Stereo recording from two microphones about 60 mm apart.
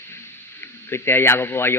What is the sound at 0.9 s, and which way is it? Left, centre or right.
Speech, left.